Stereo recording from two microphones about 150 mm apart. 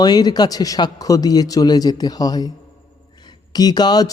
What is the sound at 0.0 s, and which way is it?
A man's voice, 25° left (ahead or behind).